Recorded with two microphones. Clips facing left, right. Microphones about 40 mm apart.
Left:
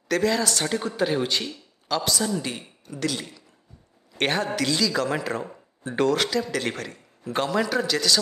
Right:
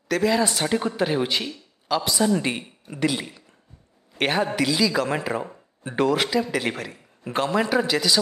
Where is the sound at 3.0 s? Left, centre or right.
Centre.